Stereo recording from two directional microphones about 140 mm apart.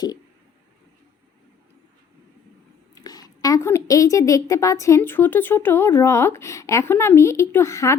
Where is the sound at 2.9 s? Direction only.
25° left (ahead or behind).